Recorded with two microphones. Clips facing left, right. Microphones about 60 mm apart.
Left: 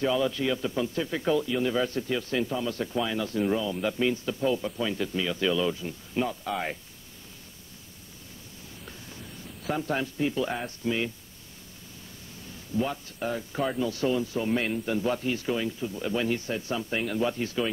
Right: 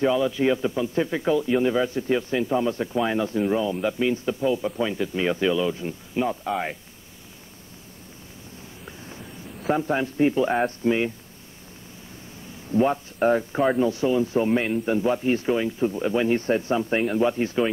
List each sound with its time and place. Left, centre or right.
0.0 s speech: centre
9.7 s speech: right
10.0 s speech: right
12.7 s speech: right
16.3 s speech: right